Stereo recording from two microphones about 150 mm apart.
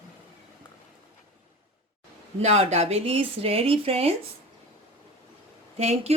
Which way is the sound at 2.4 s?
45° right (ahead or behind).